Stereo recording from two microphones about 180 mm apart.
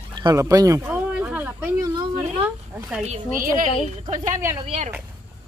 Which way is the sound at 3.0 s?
45° right (ahead or behind).